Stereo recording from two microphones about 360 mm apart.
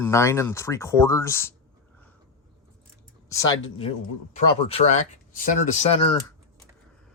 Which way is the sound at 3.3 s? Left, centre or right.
Centre.